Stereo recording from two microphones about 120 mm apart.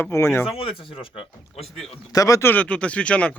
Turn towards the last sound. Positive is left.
turn(degrees=10)  # may be behind; listen again after turning